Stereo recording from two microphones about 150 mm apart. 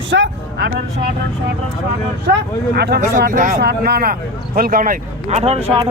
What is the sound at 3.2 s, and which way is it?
Speech, 65° right (ahead or behind).